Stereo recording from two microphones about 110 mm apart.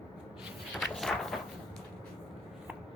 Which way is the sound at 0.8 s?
Centre (ahead or behind).